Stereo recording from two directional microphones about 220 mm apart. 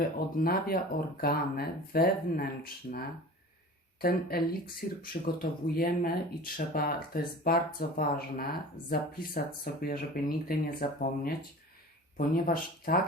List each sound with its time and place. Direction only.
0.4 s speech: 45° left (ahead or behind)
4.0 s speech: 45° left (ahead or behind)